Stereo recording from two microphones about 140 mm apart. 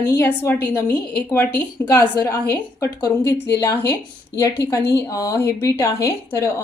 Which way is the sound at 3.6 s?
20° left (ahead or behind).